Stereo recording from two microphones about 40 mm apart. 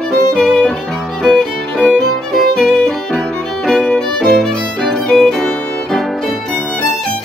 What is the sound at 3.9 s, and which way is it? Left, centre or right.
Violin, centre.